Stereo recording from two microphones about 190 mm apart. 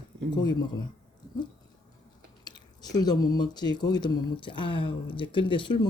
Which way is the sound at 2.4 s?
20° left (ahead or behind).